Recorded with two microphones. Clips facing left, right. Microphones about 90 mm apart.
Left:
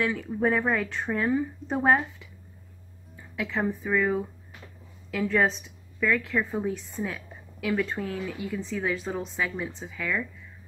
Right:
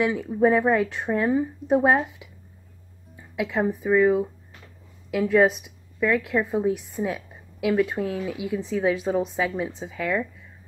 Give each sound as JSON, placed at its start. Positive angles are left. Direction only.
{"t": 0.0, "sound": "speech", "side_deg": -15}
{"t": 3.3, "sound": "a woman's voice", "side_deg": -15}